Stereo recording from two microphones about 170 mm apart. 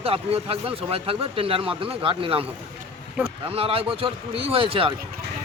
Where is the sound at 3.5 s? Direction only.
35° right (ahead or behind).